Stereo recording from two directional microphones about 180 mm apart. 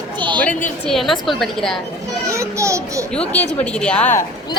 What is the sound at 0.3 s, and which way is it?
A woman's voice, 10° left (ahead or behind).